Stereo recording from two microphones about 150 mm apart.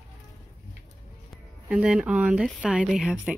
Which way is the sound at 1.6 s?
10° right (ahead or behind).